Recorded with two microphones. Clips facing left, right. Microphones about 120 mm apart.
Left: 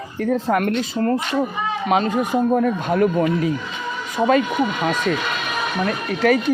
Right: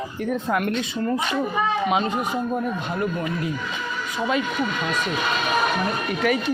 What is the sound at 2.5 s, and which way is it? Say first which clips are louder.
Speech: left 7 dB; 65° left (ahead or behind).